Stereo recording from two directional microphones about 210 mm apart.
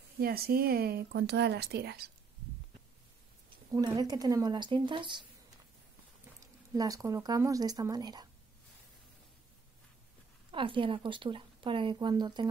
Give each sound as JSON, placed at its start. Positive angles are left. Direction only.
{"t": 0.2, "sound": "speech", "side_deg": -45}
{"t": 3.4, "sound": "speech", "side_deg": -20}
{"t": 6.7, "sound": "speech", "side_deg": -15}
{"t": 10.5, "sound": "speech", "side_deg": -25}